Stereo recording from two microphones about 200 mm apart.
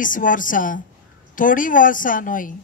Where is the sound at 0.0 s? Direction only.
40° left (ahead or behind).